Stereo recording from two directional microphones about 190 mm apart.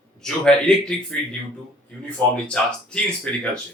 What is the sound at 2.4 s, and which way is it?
Speech, 5° left (ahead or behind).